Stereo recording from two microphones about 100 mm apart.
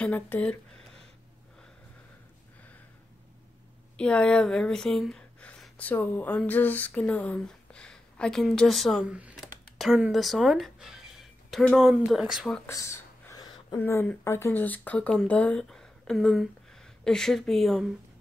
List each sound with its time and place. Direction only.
0.0 s speech: 15° left (ahead or behind)
3.9 s speech: 10° left (ahead or behind)
5.8 s speech: 15° left (ahead or behind); by 9.0 s centre (ahead or behind)
9.0 s speech: 10° right (ahead or behind)
9.8 s a sound: 5° right (ahead or behind)
11.8 s speech: 5° right (ahead or behind)
12.6 s a sound: 30° left (ahead or behind)
13.7 s speech: 25° left (ahead or behind); by 17.9 s centre (ahead or behind)